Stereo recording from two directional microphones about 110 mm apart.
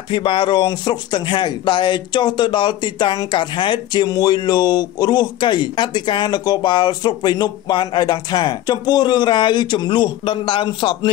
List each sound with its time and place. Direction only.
0.1 s speech: 50° left (ahead or behind)